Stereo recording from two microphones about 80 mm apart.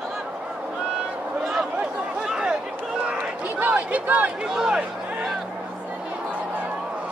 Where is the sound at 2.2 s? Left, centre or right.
Centre.